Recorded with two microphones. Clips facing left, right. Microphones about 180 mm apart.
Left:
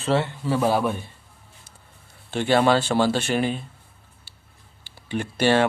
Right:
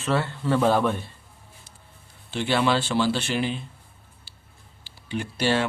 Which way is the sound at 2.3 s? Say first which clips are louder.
Left 4 dB; 45° left (ahead or behind).